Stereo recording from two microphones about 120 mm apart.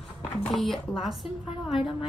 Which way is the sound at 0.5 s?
Centre (ahead or behind).